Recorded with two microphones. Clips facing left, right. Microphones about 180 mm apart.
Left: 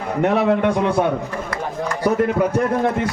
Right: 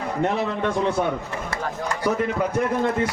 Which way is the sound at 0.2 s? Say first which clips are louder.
Left 8 dB; 65° left (ahead or behind).